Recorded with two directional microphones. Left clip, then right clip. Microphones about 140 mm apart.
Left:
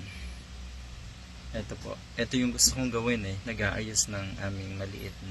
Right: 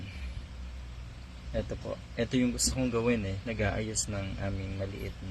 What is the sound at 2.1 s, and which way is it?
Speech, 25° right (ahead or behind).